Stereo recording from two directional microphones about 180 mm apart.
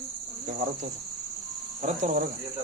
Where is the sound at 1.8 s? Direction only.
45° right (ahead or behind).